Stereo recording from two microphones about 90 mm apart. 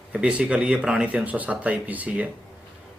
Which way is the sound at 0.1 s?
15° right (ahead or behind).